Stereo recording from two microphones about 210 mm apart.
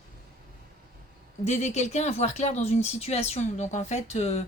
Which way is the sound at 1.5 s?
30° left (ahead or behind).